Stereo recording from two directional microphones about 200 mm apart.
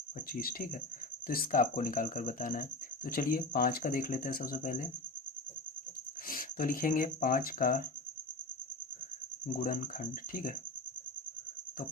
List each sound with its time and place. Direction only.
0.3 s speech: 45° left (ahead or behind)
6.2 s speech: 45° left (ahead or behind)
9.5 s speech: 45° left (ahead or behind)